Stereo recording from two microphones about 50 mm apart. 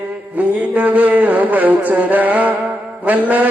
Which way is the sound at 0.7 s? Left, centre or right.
Right.